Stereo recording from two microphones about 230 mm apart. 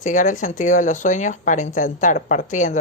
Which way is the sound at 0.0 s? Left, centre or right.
Left.